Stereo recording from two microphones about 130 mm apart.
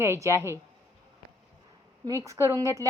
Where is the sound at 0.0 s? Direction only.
20° right (ahead or behind).